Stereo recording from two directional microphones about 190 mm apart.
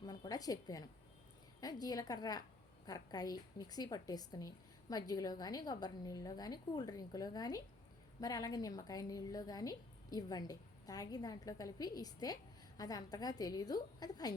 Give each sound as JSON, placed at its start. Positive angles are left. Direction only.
{"t": 0.0, "sound": "a woman's voice", "side_deg": 20}